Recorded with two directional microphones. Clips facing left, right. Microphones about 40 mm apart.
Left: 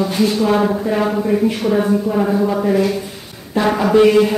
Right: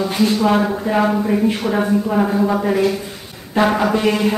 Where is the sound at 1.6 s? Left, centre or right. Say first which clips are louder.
Left 2 dB; centre.